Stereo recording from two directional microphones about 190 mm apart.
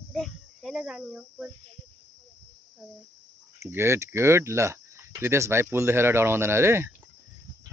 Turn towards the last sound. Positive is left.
turn(degrees=-15)  # may be behind; listen again after turning